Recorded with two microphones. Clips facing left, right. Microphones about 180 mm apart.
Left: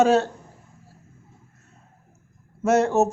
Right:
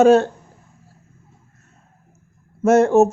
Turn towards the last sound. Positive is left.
turn(degrees=-50)  # may be behind; listen again after turning